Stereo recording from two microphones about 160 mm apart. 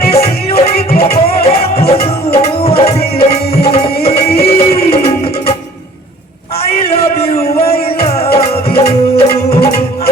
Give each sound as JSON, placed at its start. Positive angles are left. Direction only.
{"t": 0.1, "sound": "music", "side_deg": 40}
{"t": 6.7, "sound": "music", "side_deg": 40}